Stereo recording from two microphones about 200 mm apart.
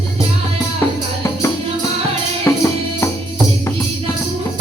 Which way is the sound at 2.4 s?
15° left (ahead or behind).